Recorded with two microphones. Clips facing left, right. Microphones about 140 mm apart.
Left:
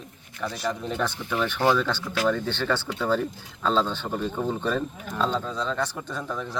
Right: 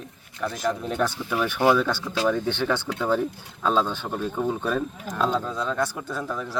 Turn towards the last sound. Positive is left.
turn(degrees=-5)  # may be behind; listen again after turning